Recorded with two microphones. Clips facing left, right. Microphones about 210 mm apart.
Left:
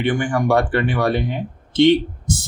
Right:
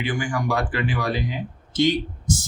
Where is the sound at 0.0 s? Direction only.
60° left (ahead or behind).